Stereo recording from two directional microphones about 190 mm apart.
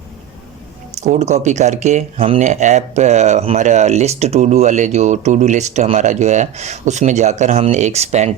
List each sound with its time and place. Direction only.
0.9 s speech: 35° right (ahead or behind)